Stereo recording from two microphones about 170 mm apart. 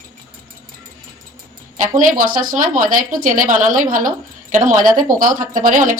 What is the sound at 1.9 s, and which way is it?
A woman's voice, 55° right (ahead or behind).